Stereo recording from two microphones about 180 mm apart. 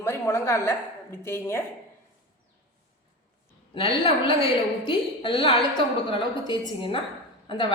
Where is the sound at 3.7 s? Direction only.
30° left (ahead or behind).